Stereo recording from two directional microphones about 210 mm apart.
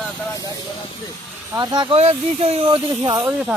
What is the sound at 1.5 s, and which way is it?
Speech, 20° right (ahead or behind).